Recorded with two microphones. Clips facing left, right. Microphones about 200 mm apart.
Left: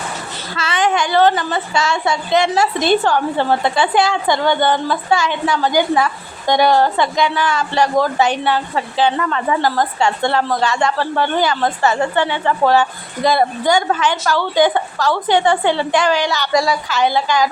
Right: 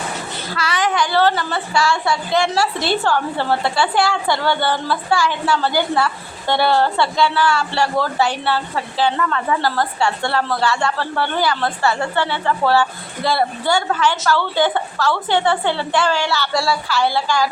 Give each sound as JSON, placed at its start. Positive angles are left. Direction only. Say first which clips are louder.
{"t": 0.5, "sound": "a woman's voice", "louder": "left 3 dB", "side_deg": 25}